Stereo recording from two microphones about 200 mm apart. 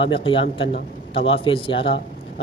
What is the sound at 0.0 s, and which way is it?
Speech, 25° left (ahead or behind).